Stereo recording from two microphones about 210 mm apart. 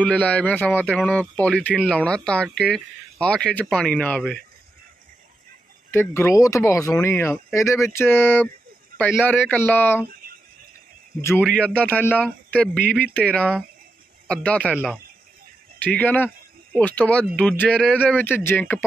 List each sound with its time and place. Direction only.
0.0 s speech: 5° left (ahead or behind)
5.9 s speech: 10° left (ahead or behind)
10.2 s a sound: 45° right (ahead or behind)
11.1 s speech: 10° left (ahead or behind)
15.8 s speech: 10° left (ahead or behind)